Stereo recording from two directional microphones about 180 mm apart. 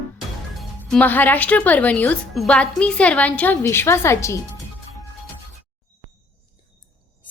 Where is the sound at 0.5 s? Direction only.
5° left (ahead or behind).